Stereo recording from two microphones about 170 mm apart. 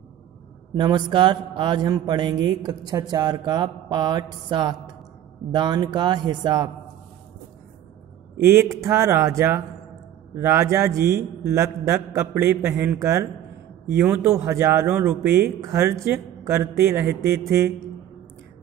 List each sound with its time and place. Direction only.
0.7 s a man's voice: 25° right (ahead or behind)
8.4 s speech: 15° right (ahead or behind)